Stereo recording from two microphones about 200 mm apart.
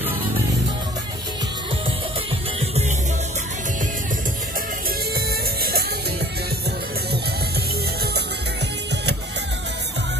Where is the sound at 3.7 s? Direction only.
40° right (ahead or behind); by 9.1 s 60° right (ahead or behind).